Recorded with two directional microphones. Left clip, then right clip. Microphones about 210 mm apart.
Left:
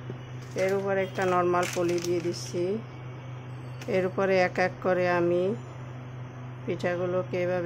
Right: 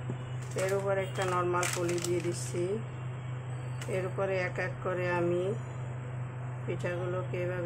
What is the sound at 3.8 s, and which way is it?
Speech, 40° left (ahead or behind).